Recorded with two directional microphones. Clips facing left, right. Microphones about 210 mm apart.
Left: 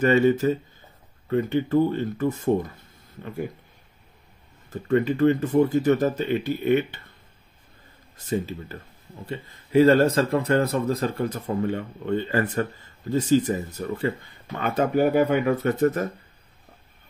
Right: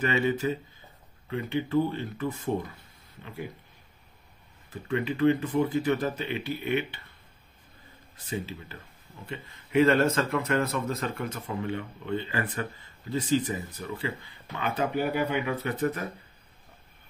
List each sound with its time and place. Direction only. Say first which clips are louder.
0.0 s speech: left 8 dB; 45° left (ahead or behind)
4.6 s speech: left 8 dB; 45° left (ahead or behind)
8.3 s speech: left 7 dB; 45° left (ahead or behind)